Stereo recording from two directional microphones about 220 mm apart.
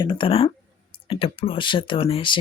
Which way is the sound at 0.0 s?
20° left (ahead or behind).